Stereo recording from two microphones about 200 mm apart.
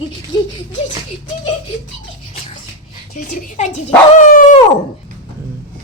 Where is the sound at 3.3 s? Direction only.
40° left (ahead or behind).